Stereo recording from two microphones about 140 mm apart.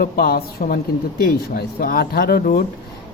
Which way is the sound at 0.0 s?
90° left.